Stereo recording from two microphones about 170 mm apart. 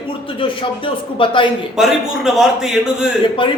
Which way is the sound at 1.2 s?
30° left (ahead or behind).